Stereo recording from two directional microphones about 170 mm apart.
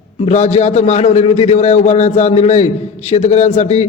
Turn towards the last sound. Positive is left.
turn(degrees=40)  # may be behind; listen again after turning